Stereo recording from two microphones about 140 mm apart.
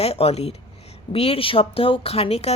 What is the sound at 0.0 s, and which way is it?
Speech, 45° left (ahead or behind).